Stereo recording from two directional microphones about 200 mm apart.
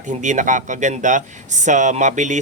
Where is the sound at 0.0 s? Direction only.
40° right (ahead or behind).